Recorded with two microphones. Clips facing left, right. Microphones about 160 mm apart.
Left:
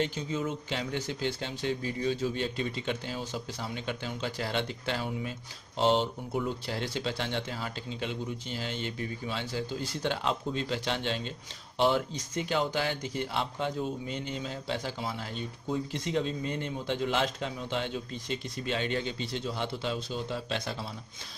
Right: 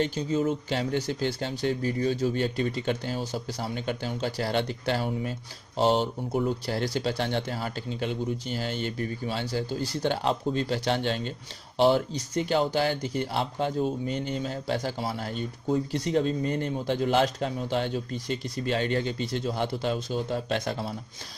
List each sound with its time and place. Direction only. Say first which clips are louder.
0.0 s speech: right 5 dB; 40° right (ahead or behind)